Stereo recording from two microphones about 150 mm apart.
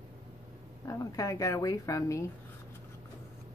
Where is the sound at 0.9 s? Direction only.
25° left (ahead or behind).